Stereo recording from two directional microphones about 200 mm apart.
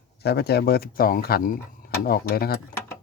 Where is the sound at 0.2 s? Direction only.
55° left (ahead or behind).